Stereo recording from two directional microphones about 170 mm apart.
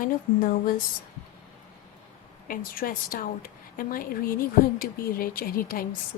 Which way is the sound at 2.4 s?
55° left (ahead or behind).